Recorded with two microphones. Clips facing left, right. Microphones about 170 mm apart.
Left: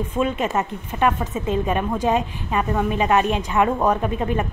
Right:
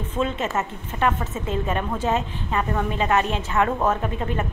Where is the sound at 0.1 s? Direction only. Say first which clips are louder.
Left 1 dB; 15° left (ahead or behind).